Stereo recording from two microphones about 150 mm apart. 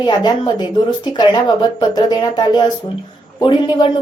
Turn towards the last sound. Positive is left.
turn(degrees=30)  # may be behind; listen again after turning